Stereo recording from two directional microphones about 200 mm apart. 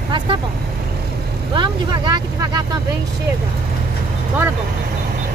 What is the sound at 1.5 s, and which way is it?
Speech, 25° right (ahead or behind).